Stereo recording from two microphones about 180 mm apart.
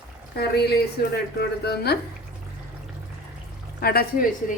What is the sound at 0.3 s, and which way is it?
Speech, 60° left (ahead or behind).